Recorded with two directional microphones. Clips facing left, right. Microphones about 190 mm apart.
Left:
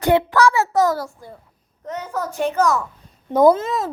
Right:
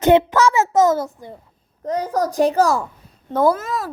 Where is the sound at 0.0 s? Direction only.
20° right (ahead or behind).